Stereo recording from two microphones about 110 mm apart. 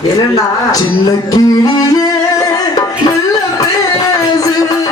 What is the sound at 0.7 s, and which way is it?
Music, 35° left (ahead or behind).